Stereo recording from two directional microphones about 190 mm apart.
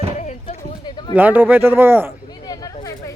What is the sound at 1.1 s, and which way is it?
A man's voice, 10° right (ahead or behind).